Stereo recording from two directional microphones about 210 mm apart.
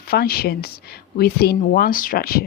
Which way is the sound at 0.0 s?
45° left (ahead or behind).